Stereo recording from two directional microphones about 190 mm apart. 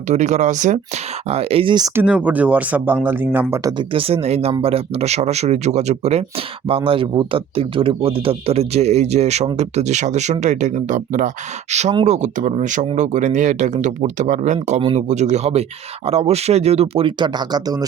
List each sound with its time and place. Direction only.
0.1 s a man's voice: 40° right (ahead or behind)
2.0 s a man's voice: 5° right (ahead or behind); by 14.8 s 40° right (ahead or behind)
14.8 s a man's voice: 25° right (ahead or behind)
15.0 s speech: 40° right (ahead or behind); by 17.8 s 20° right (ahead or behind)